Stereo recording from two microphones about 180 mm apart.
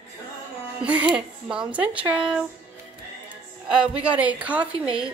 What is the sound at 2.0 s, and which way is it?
Speech, 30° right (ahead or behind).